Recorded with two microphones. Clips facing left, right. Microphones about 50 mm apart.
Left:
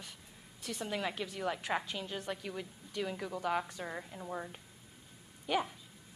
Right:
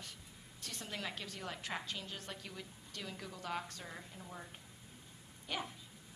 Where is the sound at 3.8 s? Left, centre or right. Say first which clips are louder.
Left 8 dB; left.